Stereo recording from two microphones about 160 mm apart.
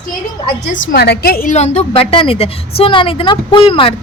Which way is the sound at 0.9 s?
85° left.